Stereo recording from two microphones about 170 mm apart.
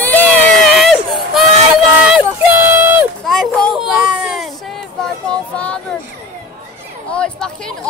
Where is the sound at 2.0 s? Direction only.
10° right (ahead or behind).